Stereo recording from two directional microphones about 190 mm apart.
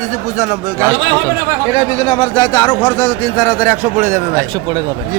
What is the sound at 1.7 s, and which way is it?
A man's voice, 25° left (ahead or behind).